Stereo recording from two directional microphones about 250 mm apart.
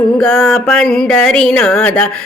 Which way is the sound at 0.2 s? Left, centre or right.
Centre.